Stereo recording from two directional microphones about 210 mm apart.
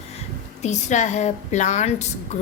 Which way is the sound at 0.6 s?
35° left (ahead or behind).